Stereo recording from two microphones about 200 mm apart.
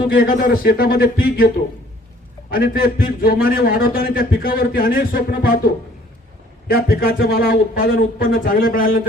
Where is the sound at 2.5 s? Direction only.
45° left (ahead or behind).